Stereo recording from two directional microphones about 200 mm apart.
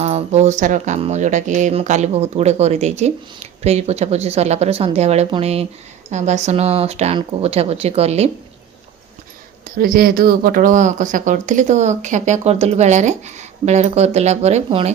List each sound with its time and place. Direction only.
0.0 s speech: 35° right (ahead or behind)
9.7 s speech: 45° right (ahead or behind); by 14.9 s 30° right (ahead or behind)